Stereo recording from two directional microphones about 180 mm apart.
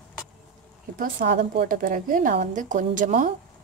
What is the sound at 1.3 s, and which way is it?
A woman's voice, 55° right (ahead or behind).